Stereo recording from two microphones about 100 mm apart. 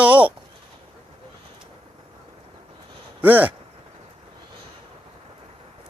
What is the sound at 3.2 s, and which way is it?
Speech, 15° right (ahead or behind).